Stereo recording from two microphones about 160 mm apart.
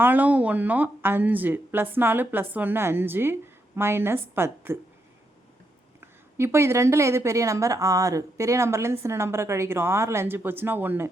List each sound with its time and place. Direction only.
0.0 s a woman's voice: 10° right (ahead or behind)
6.0 s a woman's voice: 15° right (ahead or behind)